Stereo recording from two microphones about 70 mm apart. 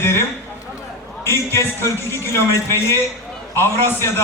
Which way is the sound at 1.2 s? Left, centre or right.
Left.